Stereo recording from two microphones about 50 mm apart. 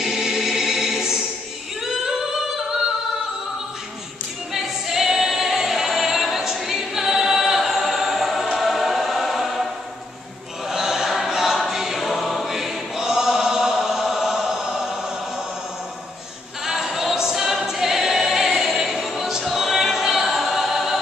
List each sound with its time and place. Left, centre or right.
0.0 s choir: centre
1.8 s singing: centre
4.6 s music: centre
10.7 s choir: centre
16.6 s choir: centre